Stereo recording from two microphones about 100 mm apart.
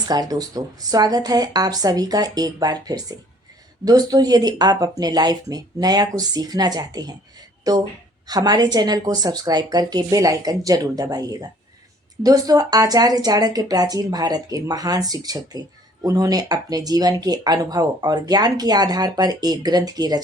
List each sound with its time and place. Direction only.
0.1 s speech: 40° right (ahead or behind)